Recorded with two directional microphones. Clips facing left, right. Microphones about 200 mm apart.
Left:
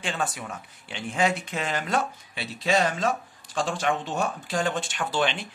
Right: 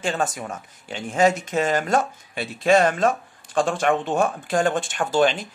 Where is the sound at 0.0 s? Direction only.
45° right (ahead or behind).